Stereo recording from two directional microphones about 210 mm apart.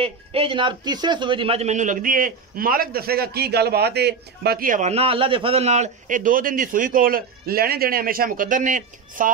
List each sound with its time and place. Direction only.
0.0 s a man's voice: 25° right (ahead or behind)